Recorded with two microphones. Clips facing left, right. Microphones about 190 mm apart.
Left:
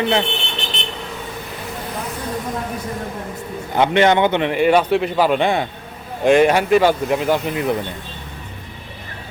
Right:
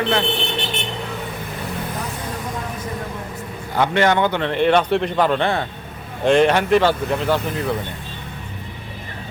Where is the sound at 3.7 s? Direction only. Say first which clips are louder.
Left 3 dB; 20° left (ahead or behind).